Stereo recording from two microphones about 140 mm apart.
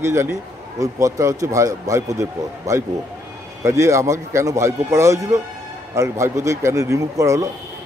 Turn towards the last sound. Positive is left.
turn(degrees=-20)  # may be behind; listen again after turning